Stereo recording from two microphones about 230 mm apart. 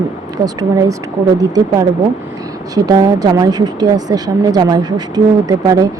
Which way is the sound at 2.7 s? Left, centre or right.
Centre.